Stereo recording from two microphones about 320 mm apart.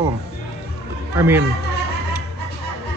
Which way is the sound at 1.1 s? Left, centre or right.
Centre.